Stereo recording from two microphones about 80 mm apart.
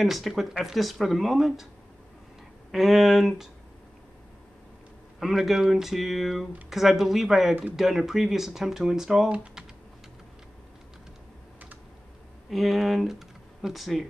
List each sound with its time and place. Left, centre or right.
0.0 s speech: centre
2.7 s speech: centre
5.2 s speech: centre
12.4 s speech: centre